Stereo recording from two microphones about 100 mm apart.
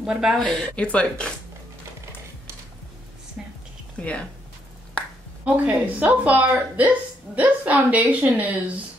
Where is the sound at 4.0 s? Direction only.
10° left (ahead or behind).